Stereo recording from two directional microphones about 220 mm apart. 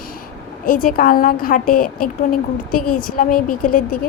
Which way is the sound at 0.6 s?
40° left (ahead or behind).